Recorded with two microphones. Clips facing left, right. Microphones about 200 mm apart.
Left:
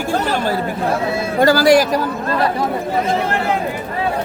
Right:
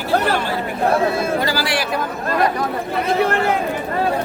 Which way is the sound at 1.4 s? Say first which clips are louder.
Left 10 dB; 45° left (ahead or behind).